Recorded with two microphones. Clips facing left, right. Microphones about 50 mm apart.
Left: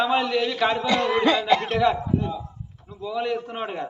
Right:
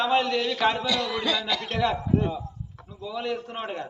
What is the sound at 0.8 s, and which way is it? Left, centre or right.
Snicker, left.